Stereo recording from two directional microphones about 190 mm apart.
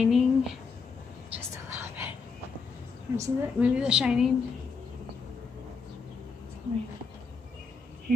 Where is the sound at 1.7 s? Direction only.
10° right (ahead or behind).